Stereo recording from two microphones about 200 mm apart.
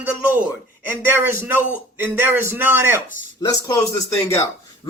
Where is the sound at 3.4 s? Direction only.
15° left (ahead or behind).